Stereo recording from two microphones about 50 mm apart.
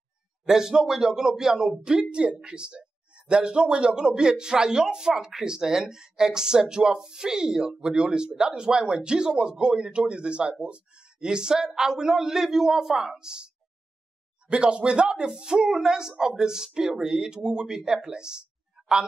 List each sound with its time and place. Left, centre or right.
0.5 s a man's voice: centre
14.5 s a man's voice: right